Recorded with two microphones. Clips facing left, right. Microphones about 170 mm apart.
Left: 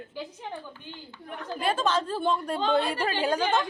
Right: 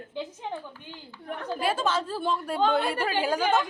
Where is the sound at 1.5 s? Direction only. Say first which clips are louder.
Left 1 dB; 5° right (ahead or behind).